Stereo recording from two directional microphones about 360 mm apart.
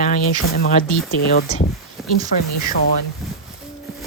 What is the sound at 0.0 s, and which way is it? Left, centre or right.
Speech, left.